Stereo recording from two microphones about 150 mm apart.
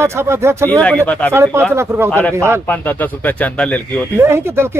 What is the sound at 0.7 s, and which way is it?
Speech, 10° left (ahead or behind).